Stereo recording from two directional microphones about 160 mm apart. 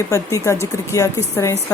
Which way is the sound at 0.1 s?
20° left (ahead or behind).